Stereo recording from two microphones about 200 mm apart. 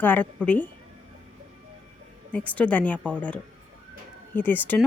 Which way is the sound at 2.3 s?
5° left (ahead or behind).